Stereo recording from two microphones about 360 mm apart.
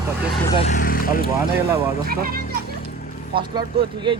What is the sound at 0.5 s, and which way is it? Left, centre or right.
Speech, centre.